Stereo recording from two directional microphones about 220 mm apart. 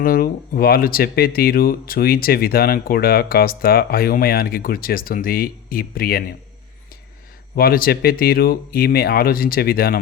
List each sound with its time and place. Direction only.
0.0 s speech: 40° left (ahead or behind)
7.5 s speech: 40° left (ahead or behind)